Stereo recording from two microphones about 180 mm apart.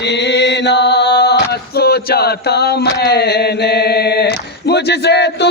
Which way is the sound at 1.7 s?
60° left (ahead or behind).